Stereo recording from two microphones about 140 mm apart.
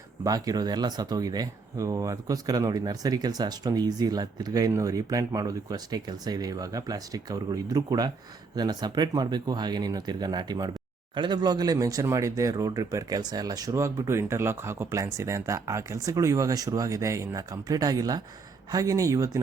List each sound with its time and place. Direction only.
0.3 s speech: 25° right (ahead or behind)